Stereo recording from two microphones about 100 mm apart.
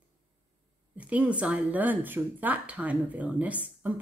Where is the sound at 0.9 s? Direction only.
15° right (ahead or behind).